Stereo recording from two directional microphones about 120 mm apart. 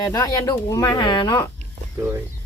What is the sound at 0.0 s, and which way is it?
Speech, 30° left (ahead or behind).